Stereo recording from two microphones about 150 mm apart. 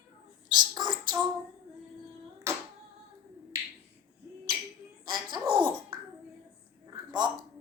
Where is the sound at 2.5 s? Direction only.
20° right (ahead or behind).